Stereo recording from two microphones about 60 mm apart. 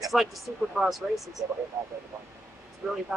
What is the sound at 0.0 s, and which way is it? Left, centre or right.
Speech, centre.